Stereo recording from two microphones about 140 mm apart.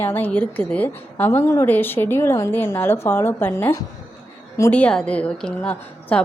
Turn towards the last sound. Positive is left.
turn(degrees=10)  # may be behind; listen again after turning